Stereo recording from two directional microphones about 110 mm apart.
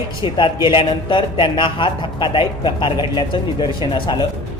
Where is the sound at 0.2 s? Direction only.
45° left (ahead or behind).